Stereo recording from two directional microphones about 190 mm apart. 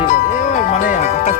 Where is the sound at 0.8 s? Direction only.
35° left (ahead or behind).